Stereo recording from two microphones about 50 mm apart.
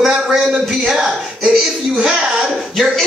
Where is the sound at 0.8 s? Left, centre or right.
Centre.